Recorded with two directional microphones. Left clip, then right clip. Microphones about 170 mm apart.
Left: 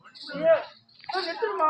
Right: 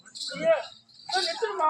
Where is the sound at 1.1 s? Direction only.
25° right (ahead or behind).